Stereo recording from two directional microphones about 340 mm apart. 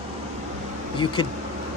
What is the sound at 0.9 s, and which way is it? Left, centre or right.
Speech, centre.